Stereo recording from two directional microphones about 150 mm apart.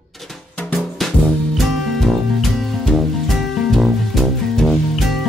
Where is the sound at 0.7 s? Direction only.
Centre (ahead or behind).